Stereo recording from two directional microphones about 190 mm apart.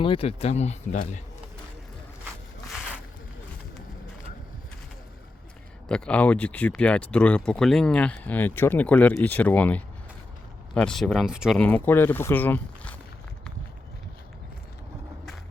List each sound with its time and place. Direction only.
0.0 s speech: 30° left (ahead or behind)
5.9 s speech: 5° left (ahead or behind)